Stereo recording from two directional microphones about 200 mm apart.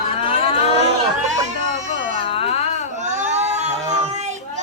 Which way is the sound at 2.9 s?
35° right (ahead or behind).